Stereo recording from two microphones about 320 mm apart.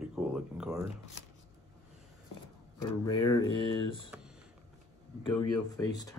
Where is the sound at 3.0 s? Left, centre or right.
Centre.